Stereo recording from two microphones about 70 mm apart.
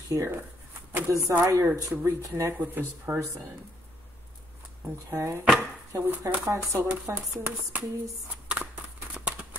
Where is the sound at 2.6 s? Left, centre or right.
Right.